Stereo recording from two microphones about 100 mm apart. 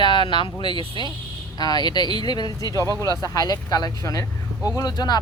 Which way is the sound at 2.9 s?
35° right (ahead or behind).